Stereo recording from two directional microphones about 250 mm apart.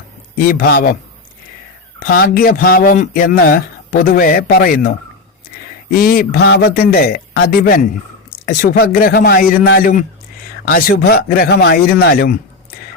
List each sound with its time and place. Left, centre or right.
0.3 s speech: left
2.0 s speech: left